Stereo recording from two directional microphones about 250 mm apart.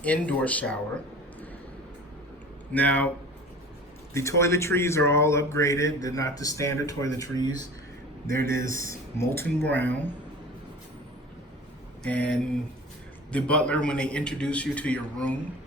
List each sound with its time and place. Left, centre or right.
0.0 s a man's voice: centre
2.7 s speech: centre
4.1 s speech: centre
8.6 s speech: right
8.9 s speech: centre
12.0 s a man's voice: centre